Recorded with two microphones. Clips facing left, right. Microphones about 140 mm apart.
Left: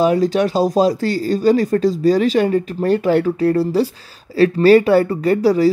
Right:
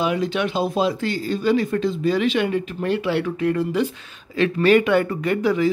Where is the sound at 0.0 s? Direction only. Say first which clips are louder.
Left 7 dB; 40° left (ahead or behind).